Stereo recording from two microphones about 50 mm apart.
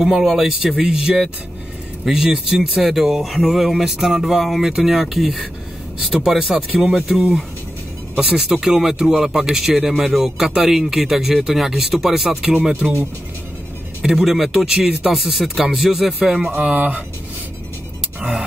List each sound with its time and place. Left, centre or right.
0.0 s speech: centre
8.2 s speech: centre
14.0 s speech: centre
16.4 s speech: right